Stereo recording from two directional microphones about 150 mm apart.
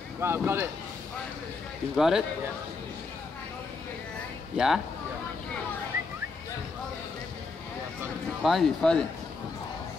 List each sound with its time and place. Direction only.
0.2 s speech: 15° right (ahead or behind)
2.0 s speech: 5° right (ahead or behind)
4.6 s speech: 5° right (ahead or behind)
8.4 s speech: centre (ahead or behind)